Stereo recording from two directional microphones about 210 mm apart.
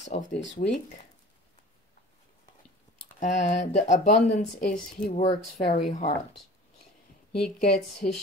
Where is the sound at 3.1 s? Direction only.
35° left (ahead or behind).